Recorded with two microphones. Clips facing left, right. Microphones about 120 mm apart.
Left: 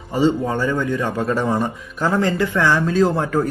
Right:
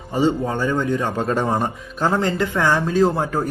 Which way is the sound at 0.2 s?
15° right (ahead or behind).